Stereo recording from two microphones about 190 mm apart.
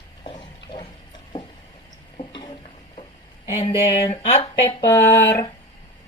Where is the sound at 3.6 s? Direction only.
30° left (ahead or behind).